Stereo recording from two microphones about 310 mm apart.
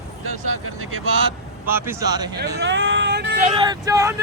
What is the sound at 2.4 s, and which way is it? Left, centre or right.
Speech, right.